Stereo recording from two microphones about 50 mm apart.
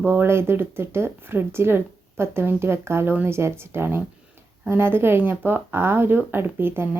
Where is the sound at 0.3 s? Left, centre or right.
Right.